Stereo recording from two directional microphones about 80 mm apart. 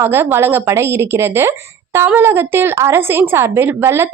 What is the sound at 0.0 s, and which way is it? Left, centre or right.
A woman's voice, right.